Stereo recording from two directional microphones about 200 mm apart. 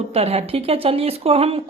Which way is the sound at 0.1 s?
30° right (ahead or behind).